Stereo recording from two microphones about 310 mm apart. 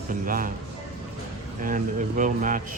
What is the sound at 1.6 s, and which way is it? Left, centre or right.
Speech, right.